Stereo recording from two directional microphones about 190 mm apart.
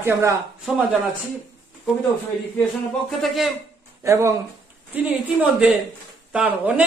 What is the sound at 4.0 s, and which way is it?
A man's voice, 15° right (ahead or behind).